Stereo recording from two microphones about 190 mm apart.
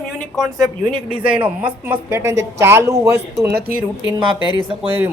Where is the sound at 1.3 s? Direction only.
10° right (ahead or behind).